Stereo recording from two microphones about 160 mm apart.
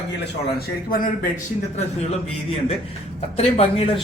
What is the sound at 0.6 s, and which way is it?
Speech, 65° left (ahead or behind).